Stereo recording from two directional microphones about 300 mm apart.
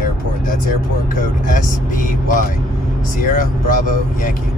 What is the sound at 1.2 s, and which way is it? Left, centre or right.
Speech, left.